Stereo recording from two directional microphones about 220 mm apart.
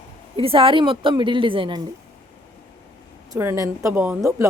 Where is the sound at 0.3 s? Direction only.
25° right (ahead or behind).